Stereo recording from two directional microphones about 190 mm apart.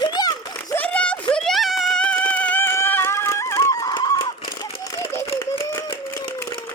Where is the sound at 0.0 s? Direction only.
20° left (ahead or behind).